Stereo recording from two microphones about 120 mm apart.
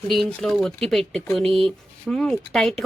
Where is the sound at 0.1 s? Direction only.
Centre (ahead or behind).